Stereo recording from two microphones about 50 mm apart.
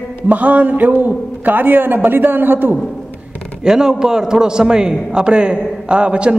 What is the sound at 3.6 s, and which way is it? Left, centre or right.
A man's voice, centre.